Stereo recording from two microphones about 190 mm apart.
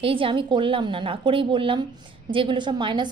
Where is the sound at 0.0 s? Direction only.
25° right (ahead or behind).